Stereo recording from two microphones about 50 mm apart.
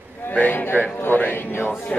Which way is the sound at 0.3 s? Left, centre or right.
Left.